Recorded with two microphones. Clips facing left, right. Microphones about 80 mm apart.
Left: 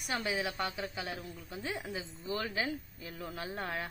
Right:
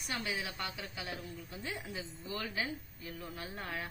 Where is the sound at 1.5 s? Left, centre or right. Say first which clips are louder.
Left 5 dB; left.